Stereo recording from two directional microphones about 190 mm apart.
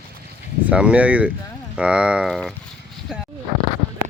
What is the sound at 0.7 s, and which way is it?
Speech, 5° right (ahead or behind).